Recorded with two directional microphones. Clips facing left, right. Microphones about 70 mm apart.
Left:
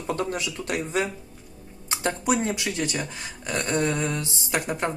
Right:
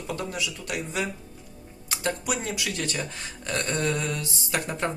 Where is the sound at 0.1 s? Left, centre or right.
Left.